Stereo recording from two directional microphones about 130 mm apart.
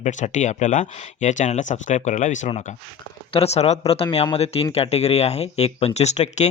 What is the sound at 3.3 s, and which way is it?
Speech, 55° left (ahead or behind).